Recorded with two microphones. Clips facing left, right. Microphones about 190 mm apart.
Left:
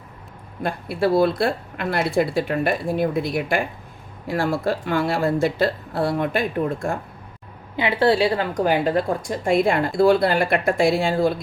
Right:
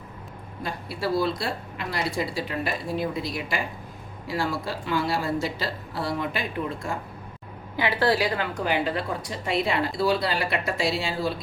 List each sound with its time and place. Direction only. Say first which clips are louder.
0.6 s speech: left 8 dB; 55° left (ahead or behind)
7.8 s a woman's voice: left 5 dB; 25° left (ahead or behind)
8.5 s speech: left 6 dB; 45° left (ahead or behind)